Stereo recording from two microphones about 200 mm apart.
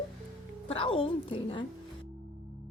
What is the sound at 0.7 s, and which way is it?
Speech, 25° left (ahead or behind).